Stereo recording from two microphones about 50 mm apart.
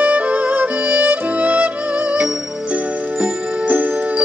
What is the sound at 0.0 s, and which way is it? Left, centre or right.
Music, right.